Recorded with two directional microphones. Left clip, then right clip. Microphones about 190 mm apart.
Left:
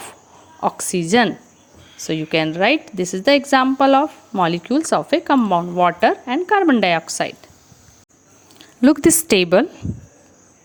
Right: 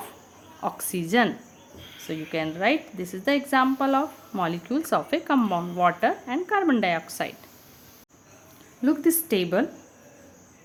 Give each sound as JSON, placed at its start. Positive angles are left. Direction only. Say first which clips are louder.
{"t": 0.6, "sound": "a woman's voice", "louder": "left 9 dB", "side_deg": 35}
{"t": 8.5, "sound": "a woman's voice", "louder": "left 10 dB", "side_deg": 50}